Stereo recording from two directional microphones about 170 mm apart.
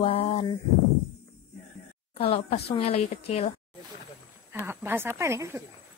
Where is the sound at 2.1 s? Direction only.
35° left (ahead or behind).